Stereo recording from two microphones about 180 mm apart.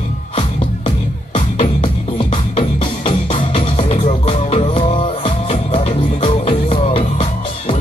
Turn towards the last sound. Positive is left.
turn(degrees=30)  # may be behind; listen again after turning